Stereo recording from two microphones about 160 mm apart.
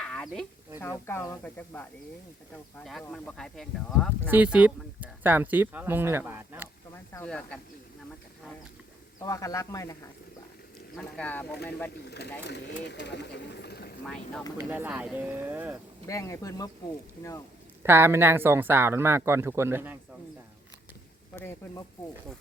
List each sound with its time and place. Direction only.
0.0 s a sound: 5° left (ahead or behind)
0.8 s speech: 15° left (ahead or behind)
4.3 s speech: 10° right (ahead or behind)
7.3 s speech: 5° left (ahead or behind)
9.2 s a man's voice: 20° left (ahead or behind)
10.9 s speech: 10° left (ahead or behind)
12.0 s speech: 90° left
14.0 s speech: 5° left (ahead or behind)
14.6 s speech: 10° right (ahead or behind)
16.0 s a man's voice: 20° left (ahead or behind)
17.8 s speech: 15° right (ahead or behind)